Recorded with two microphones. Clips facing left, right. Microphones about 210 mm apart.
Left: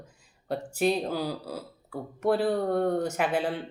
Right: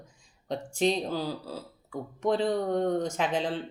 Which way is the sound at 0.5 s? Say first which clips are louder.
Left 1 dB; 5° left (ahead or behind).